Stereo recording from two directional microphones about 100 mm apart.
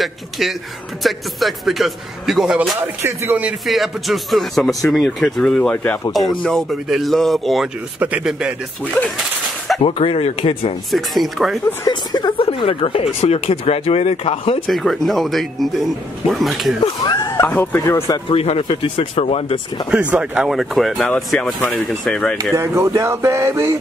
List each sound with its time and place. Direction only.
0.0 s a man's voice: centre (ahead or behind)
3.0 s speech: 25° right (ahead or behind)
3.6 s speech: centre (ahead or behind)
8.0 s speech: 15° right (ahead or behind)
9.8 s speech: 70° left (ahead or behind)
10.9 s speech: centre (ahead or behind)
11.8 s speech: 45° left (ahead or behind); by 14.6 s 80° left
14.7 s speech: centre (ahead or behind)
17.4 s speech: 20° left (ahead or behind)
18.3 s speech: 75° left (ahead or behind)
19.9 s speech: 10° right (ahead or behind); by 22.4 s 5° left (ahead or behind)
22.4 s speech: 30° right (ahead or behind)